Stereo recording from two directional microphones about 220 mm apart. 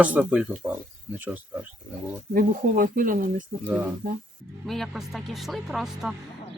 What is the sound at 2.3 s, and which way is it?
Speech, 40° right (ahead or behind).